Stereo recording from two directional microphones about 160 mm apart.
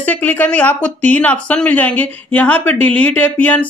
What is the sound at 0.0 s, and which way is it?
Speech, 10° left (ahead or behind).